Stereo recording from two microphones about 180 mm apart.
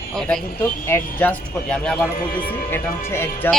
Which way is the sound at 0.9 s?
10° left (ahead or behind).